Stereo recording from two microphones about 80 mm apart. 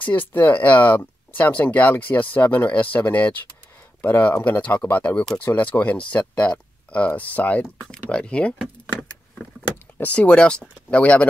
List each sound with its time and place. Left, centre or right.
0.3 s speech: left
9.9 s speech: centre